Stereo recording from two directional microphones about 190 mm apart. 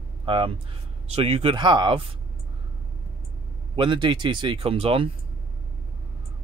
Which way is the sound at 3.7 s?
25° right (ahead or behind).